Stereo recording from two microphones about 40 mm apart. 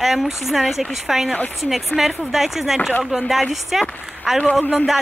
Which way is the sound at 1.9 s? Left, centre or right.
Left.